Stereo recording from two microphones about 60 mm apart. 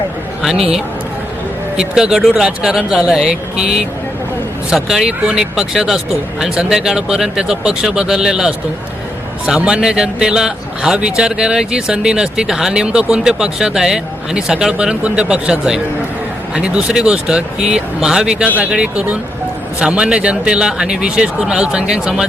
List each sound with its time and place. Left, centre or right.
0.4 s a man's voice: centre
9.6 s a man's voice: centre
18.4 s a man's voice: right